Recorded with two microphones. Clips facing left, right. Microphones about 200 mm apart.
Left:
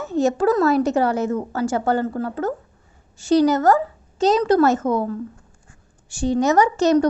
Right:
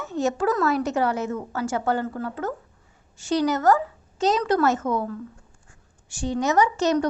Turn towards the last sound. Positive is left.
turn(degrees=40)  # may be behind; listen again after turning